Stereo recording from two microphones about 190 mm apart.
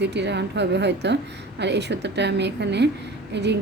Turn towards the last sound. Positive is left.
turn(degrees=-65)  # may be behind; listen again after turning